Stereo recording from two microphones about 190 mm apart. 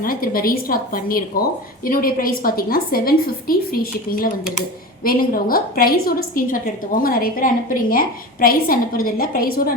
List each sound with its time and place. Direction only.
0.0 s a woman's voice: 50° left (ahead or behind)